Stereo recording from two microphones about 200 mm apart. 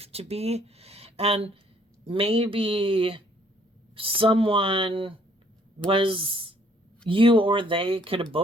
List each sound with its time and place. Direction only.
0.0 s speech: 30° right (ahead or behind)